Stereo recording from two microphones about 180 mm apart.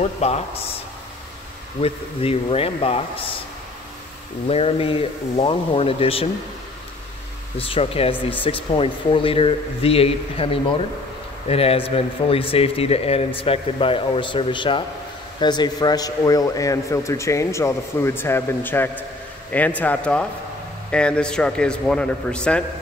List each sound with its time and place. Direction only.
0.2 s speech: 35° left (ahead or behind)
4.5 s speech: 35° left (ahead or behind)
7.5 s a man's voice: 30° left (ahead or behind); by 22.6 s 5° left (ahead or behind)